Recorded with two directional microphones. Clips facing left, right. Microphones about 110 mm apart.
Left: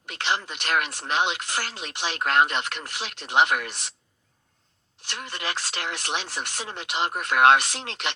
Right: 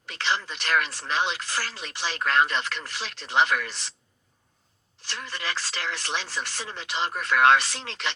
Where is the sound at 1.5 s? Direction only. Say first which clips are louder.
Left 1 dB; 60° left (ahead or behind).